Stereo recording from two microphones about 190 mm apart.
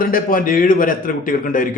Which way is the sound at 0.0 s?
50° left (ahead or behind).